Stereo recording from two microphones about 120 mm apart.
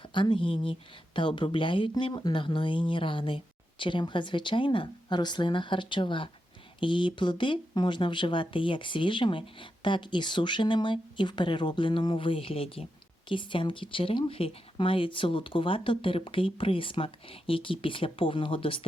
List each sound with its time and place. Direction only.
0.1 s speech: 40° left (ahead or behind)